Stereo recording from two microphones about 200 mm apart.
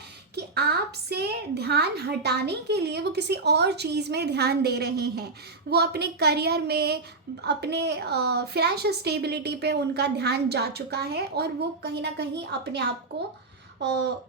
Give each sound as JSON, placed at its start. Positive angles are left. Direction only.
{"t": 0.3, "sound": "a woman's voice", "side_deg": -55}
{"t": 13.8, "sound": "a woman's voice", "side_deg": -55}